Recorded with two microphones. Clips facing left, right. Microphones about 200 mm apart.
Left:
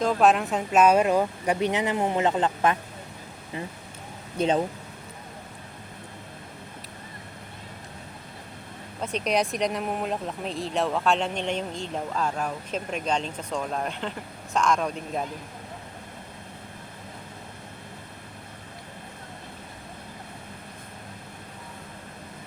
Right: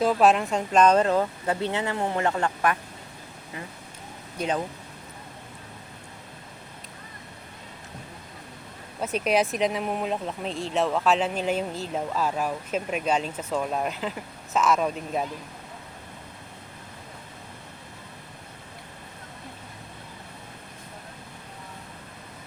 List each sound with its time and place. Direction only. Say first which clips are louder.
0.0 s speech: right 1 dB; 5° right (ahead or behind); by 2.7 s 20° left (ahead or behind)
4.4 s speech: left 4 dB; 25° left (ahead or behind)
9.0 s speech: right 2 dB; 5° right (ahead or behind)